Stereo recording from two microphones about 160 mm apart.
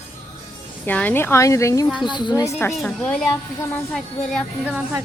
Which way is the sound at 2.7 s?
5° left (ahead or behind).